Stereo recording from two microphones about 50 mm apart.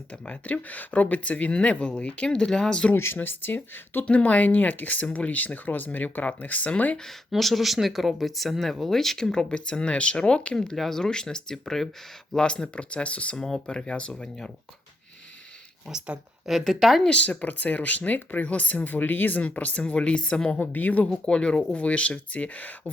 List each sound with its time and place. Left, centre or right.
0.3 s speech: left
2.9 s speech: left
3.2 s speech: left
4.0 s speech: left
7.3 s speech: centre
12.5 s speech: left
13.3 s speech: centre
15.9 s speech: centre
16.5 s speech: centre
17.1 s speech: left
20.6 s speech: left
21.2 s speech: centre